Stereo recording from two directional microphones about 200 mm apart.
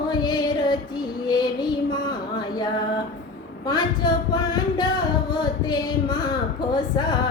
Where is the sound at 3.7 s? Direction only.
20° left (ahead or behind).